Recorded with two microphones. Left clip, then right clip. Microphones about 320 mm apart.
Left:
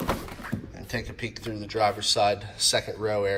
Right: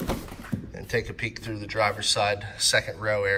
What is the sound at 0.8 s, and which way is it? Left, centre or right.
A man's voice, centre.